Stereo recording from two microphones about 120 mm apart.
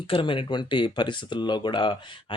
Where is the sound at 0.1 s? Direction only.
45° left (ahead or behind).